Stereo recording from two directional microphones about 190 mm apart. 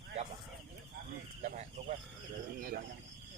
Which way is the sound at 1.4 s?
35° right (ahead or behind).